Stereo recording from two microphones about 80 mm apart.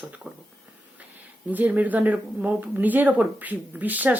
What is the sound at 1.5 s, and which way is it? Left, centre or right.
Speech, centre.